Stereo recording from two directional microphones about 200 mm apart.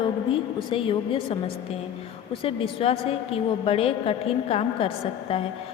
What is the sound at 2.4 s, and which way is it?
A woman's voice, 30° left (ahead or behind).